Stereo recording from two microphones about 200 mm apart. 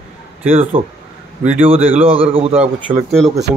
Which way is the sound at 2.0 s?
30° right (ahead or behind).